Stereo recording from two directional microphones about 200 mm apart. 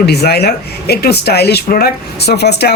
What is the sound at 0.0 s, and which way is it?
A man's voice, 55° left (ahead or behind).